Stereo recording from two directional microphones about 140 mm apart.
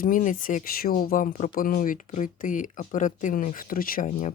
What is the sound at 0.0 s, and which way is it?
Speech, 70° left (ahead or behind).